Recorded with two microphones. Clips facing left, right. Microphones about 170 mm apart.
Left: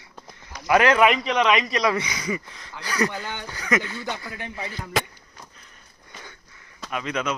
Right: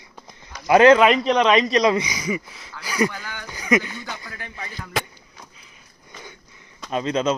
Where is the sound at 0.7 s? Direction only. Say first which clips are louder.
Right 5 dB; 25° right (ahead or behind).